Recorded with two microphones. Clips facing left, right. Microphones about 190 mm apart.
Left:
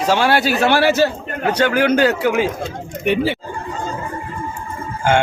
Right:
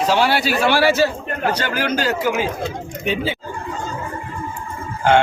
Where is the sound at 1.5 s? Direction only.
60° left (ahead or behind).